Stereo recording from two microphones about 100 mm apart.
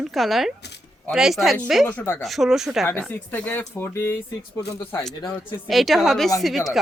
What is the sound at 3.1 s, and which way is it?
Speech, 20° left (ahead or behind).